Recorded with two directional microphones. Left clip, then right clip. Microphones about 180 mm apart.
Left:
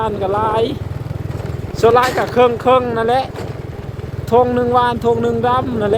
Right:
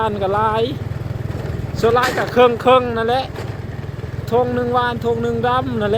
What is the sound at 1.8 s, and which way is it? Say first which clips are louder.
Speech: left 4 dB; 20° left (ahead or behind).